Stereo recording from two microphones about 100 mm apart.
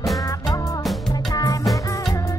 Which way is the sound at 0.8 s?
Centre (ahead or behind).